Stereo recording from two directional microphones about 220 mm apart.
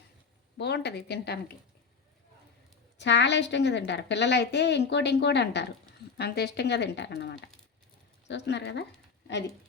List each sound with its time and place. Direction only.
0.5 s a woman's voice: 50° left (ahead or behind)
3.0 s a woman's voice: 50° left (ahead or behind)